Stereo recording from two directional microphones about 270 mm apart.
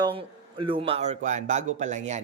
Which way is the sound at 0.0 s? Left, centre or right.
Centre.